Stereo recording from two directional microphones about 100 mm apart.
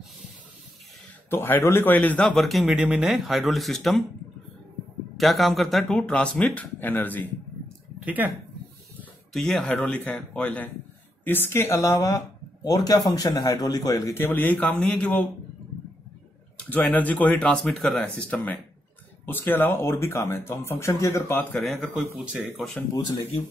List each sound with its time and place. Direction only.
1.3 s speech: 25° left (ahead or behind); by 2.6 s 5° left (ahead or behind)
2.6 s speech: 10° right (ahead or behind)
5.1 s speech: centre (ahead or behind); by 7.2 s 20° left (ahead or behind)
8.0 s speech: 15° right (ahead or behind)
9.3 s speech: 5° left (ahead or behind)
9.7 s a man's voice: 15° left (ahead or behind); by 14.2 s 35° left (ahead or behind)
14.2 s speech: 15° left (ahead or behind)
16.5 s speech: 15° left (ahead or behind)
21.5 s speech: centre (ahead or behind)